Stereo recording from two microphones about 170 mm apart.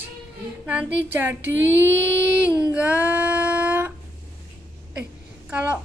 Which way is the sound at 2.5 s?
20° left (ahead or behind).